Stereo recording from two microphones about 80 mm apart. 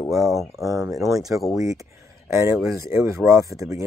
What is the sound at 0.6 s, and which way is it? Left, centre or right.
Speech, right.